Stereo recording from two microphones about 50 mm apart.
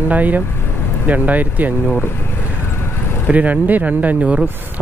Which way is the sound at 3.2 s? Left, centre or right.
Right.